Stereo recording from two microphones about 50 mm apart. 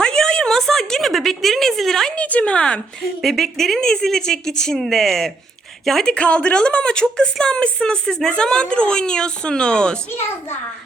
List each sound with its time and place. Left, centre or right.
0.0 s a sound: centre
2.1 s a woman's voice: left
3.0 s a woman's voice: centre
6.1 s a woman's voice: left